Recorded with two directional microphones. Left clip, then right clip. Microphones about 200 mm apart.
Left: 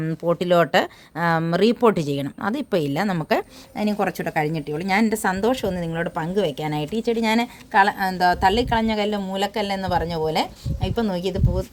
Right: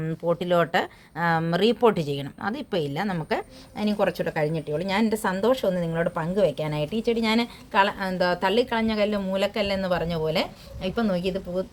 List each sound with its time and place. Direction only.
0.0 s speech: 35° left (ahead or behind)